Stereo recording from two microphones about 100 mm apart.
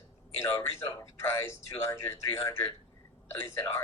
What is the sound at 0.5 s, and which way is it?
Speech, 25° left (ahead or behind).